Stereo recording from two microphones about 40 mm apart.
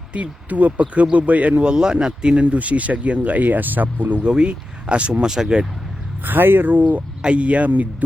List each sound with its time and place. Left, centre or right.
0.1 s speech: right
1.6 s speech: centre
2.4 s speech: right
4.2 s speech: right
5.2 s speech: centre
6.2 s speech: right
7.2 s speech: right